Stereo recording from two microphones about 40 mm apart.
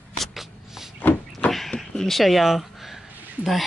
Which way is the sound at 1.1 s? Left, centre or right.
Left.